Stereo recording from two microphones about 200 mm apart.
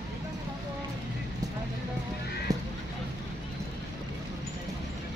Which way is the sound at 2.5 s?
15° right (ahead or behind).